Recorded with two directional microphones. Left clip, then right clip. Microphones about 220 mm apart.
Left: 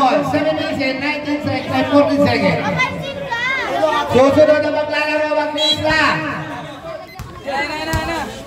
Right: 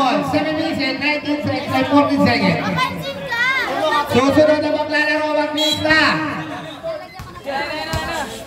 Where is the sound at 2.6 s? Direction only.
50° right (ahead or behind).